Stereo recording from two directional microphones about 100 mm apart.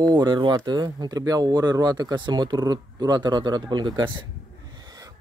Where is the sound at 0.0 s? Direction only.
45° right (ahead or behind).